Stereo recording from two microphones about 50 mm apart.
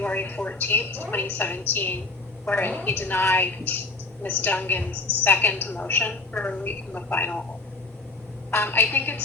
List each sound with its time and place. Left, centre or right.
0.0 s a woman's voice: left
8.4 s a woman's voice: left